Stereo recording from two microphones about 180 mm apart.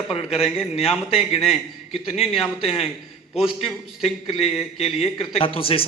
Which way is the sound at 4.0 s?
35° left (ahead or behind).